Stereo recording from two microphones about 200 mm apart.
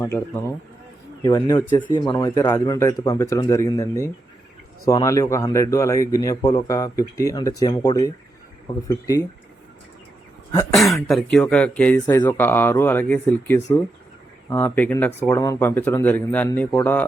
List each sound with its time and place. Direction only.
0.0 s speech: 15° left (ahead or behind)
10.7 s speech: centre (ahead or behind)